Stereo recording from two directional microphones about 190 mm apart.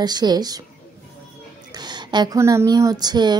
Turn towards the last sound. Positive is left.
turn(degrees=-20)  # may be behind; listen again after turning